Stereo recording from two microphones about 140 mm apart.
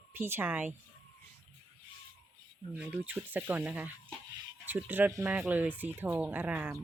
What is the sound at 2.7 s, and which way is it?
Speech, 15° right (ahead or behind).